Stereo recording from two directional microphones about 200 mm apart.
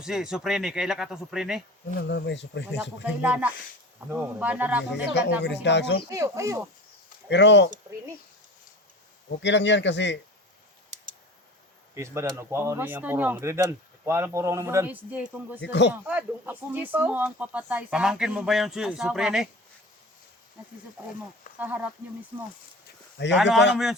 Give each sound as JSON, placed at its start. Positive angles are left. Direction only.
{"t": 0.0, "sound": "speech", "side_deg": 0}
{"t": 2.0, "sound": "speech", "side_deg": 60}
{"t": 3.0, "sound": "speech", "side_deg": -5}
{"t": 5.4, "sound": "speech", "side_deg": 60}
{"t": 6.1, "sound": "speech", "side_deg": -15}
{"t": 7.3, "sound": "speech", "side_deg": 60}
{"t": 9.4, "sound": "speech", "side_deg": 60}
{"t": 11.9, "sound": "speech", "side_deg": -15}
{"t": 15.6, "sound": "speech", "side_deg": 60}
{"t": 16.0, "sound": "speech", "side_deg": -10}
{"t": 21.6, "sound": "speech", "side_deg": -10}
{"t": 23.1, "sound": "speech", "side_deg": 60}
{"t": 23.7, "sound": "speech", "side_deg": 0}